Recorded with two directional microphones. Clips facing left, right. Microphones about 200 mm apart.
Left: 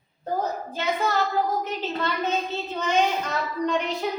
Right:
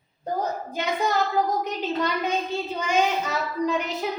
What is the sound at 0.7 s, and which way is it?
Speech, 15° right (ahead or behind).